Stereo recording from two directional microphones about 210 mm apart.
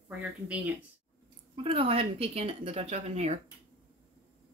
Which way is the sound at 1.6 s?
25° right (ahead or behind).